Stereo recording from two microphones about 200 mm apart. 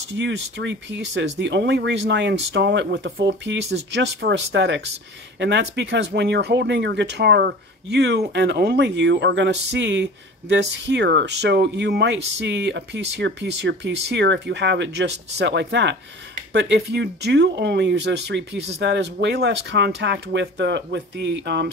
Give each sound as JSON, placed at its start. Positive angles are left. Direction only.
{"t": 0.2, "sound": "speech", "side_deg": -60}